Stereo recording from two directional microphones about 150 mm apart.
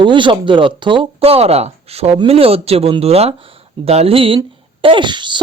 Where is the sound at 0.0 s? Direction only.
35° right (ahead or behind).